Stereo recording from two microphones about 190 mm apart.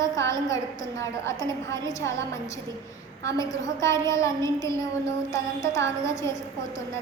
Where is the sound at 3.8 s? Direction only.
15° left (ahead or behind).